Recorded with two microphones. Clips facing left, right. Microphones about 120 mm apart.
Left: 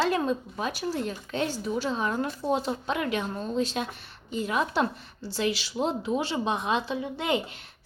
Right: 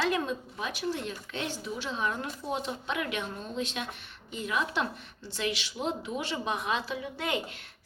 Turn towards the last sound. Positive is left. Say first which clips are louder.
# left 5 dB
turn(degrees=25)  # may be behind; listen again after turning